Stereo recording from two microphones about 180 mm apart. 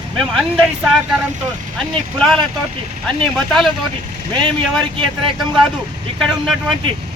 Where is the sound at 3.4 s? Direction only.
Centre (ahead or behind).